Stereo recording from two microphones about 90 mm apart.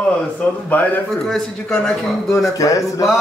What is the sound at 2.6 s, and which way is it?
Speech, 40° left (ahead or behind).